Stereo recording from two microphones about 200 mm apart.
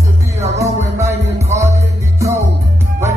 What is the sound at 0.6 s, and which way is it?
Music, 15° right (ahead or behind).